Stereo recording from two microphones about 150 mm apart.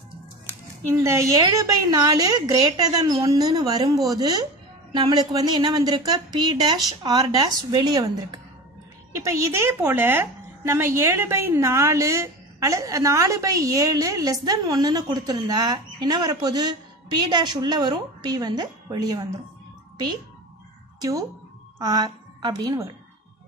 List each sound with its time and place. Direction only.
1.0 s a woman's voice: 25° right (ahead or behind)
21.0 s a woman's voice: 25° right (ahead or behind)